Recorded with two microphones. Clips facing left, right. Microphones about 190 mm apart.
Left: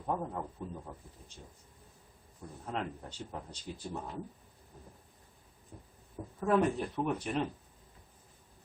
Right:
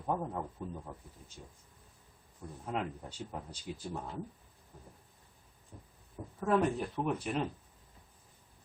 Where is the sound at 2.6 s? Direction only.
5° right (ahead or behind).